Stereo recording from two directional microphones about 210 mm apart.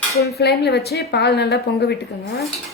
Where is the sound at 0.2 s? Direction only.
50° left (ahead or behind).